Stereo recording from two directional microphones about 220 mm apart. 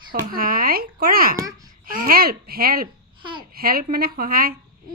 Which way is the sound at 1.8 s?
40° right (ahead or behind).